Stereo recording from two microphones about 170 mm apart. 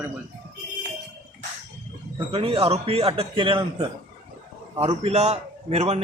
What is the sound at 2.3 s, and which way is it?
A man's voice, 35° right (ahead or behind).